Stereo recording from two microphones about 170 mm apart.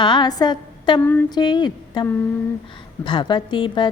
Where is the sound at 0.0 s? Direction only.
25° left (ahead or behind).